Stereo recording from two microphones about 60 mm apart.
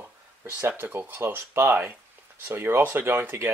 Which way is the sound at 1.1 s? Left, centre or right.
Right.